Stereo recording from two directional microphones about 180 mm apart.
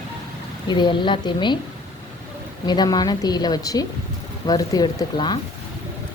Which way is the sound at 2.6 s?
25° left (ahead or behind).